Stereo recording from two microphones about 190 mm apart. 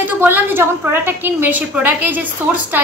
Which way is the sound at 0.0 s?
10° right (ahead or behind).